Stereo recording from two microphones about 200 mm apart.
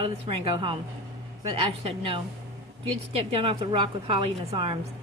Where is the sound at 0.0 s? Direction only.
30° right (ahead or behind).